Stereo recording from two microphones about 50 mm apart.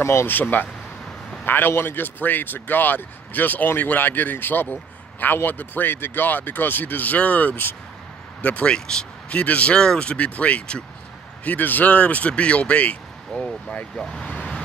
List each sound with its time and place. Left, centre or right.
0.0 s speech: left
0.3 s speech: left
8.4 s speech: left
11.4 s speech: left; by 14.6 s centre